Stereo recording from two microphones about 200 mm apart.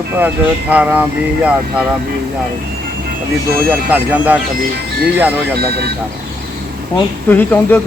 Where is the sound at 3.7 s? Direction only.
5° right (ahead or behind).